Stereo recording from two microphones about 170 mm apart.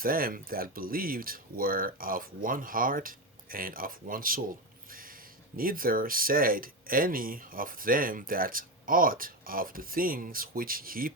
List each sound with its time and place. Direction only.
0.0 s speech: 60° right (ahead or behind)
4.9 s a sound: 55° right (ahead or behind)
5.5 s speech: 55° right (ahead or behind)